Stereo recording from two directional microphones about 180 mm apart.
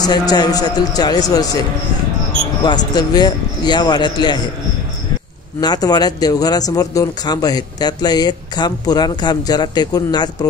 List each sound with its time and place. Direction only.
0.0 s speech: 20° left (ahead or behind)
2.6 s speech: 25° left (ahead or behind)
5.6 s speech: 20° left (ahead or behind)